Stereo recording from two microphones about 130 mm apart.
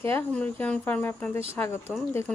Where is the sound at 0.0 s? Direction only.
15° left (ahead or behind).